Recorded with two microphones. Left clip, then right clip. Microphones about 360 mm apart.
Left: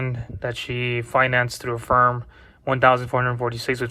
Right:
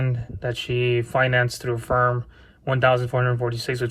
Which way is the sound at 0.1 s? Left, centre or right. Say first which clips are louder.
Even; centre.